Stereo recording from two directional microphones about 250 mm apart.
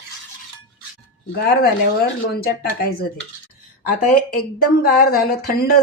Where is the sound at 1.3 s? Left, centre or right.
Left.